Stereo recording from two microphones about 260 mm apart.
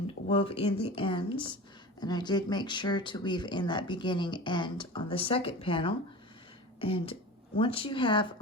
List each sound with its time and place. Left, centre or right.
0.3 s speech: left